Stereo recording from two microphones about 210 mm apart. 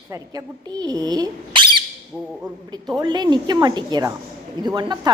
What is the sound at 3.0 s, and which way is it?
Speech, 20° right (ahead or behind).